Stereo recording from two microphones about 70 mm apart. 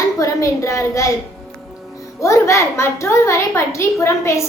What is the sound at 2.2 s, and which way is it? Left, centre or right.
A woman's voice, left.